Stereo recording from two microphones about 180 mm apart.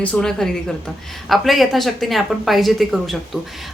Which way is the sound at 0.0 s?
5° left (ahead or behind).